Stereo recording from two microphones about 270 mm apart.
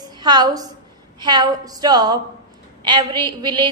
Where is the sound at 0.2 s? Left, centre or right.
Centre.